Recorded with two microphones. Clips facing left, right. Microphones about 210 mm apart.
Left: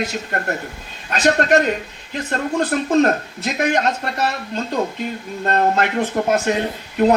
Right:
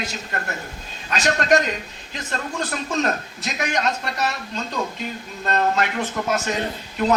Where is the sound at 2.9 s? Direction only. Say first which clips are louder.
Left 8 dB; 55° left (ahead or behind).